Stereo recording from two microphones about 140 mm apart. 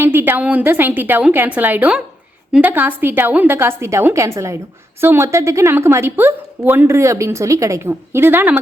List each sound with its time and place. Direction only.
0.0 s a woman's voice: 15° right (ahead or behind)